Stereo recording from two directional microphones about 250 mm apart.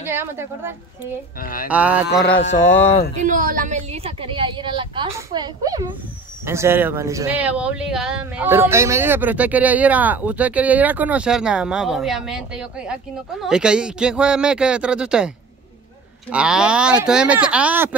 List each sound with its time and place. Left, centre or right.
0.0 s speech: centre
1.4 s speech: left
1.7 s speech: centre
3.2 s a woman's voice: right; by 17.9 s centre